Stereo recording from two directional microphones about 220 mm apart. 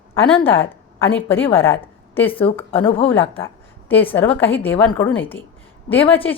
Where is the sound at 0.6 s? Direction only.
10° left (ahead or behind).